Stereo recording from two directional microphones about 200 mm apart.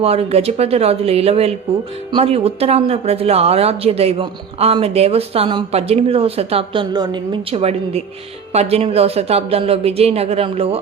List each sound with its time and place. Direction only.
0.0 s speech: 30° right (ahead or behind)